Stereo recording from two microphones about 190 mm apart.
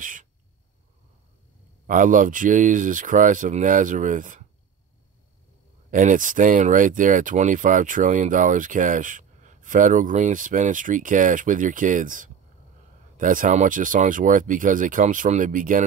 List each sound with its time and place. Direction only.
0.0 s owl: 45° right (ahead or behind)
1.9 s speech: 45° right (ahead or behind)
5.9 s speech: 45° right (ahead or behind)